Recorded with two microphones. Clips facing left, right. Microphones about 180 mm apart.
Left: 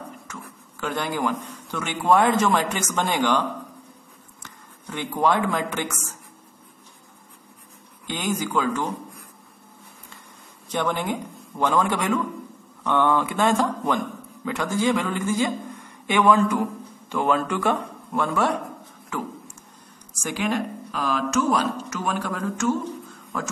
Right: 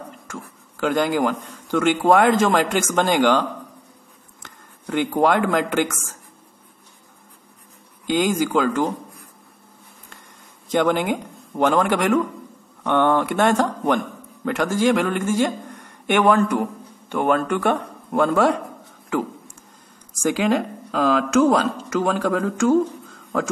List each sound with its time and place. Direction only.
0.3 s a man's voice: 85° right
4.4 s a sound: 90° right
5.2 s a woman's voice: 85° right
8.1 s a woman's voice: 90° right
10.7 s a woman's voice: 85° right
12.8 s a man's voice: 60° right (ahead or behind); by 18.5 s 90° right
19.0 s a sound: 90° right
20.2 s a woman's voice: 90° right